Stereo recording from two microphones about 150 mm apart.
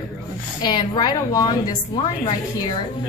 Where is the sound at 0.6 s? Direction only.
30° left (ahead or behind).